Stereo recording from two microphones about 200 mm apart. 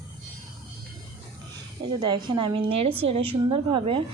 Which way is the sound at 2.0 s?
20° right (ahead or behind).